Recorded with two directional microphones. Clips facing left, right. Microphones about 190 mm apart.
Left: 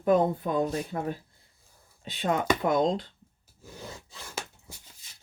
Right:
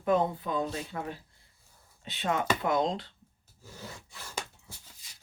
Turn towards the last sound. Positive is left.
turn(degrees=10)  # may be behind; listen again after turning